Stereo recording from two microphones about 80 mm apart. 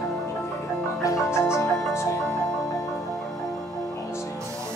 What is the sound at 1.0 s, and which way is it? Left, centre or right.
Music, left.